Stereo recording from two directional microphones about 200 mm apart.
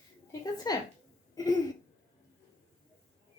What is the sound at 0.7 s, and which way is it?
Speech, 20° left (ahead or behind).